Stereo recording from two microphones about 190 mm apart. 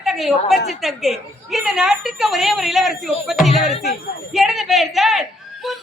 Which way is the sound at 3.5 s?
35° left (ahead or behind).